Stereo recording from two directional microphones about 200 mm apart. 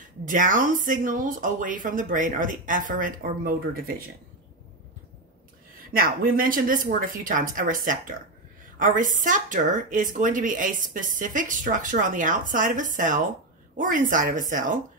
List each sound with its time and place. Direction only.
0.2 s speech: 40° right (ahead or behind)
5.8 s speech: 45° right (ahead or behind)